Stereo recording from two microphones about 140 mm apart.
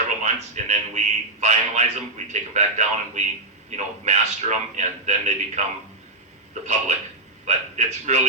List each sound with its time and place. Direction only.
0.2 s a man's voice: 55° right (ahead or behind)
6.5 s a man's voice: 55° right (ahead or behind)